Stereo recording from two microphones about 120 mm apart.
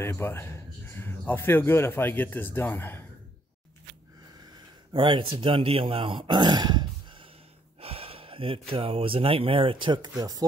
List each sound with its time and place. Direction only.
0.0 s speech: 20° left (ahead or behind)
4.9 s speech: 45° right (ahead or behind)
7.8 s speech: 55° right (ahead or behind); by 10.4 s 30° right (ahead or behind)